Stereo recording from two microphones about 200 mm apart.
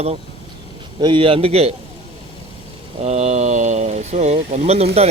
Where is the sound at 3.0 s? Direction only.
35° right (ahead or behind).